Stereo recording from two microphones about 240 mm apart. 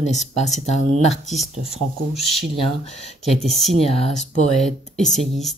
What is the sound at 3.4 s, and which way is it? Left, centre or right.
Speech, centre.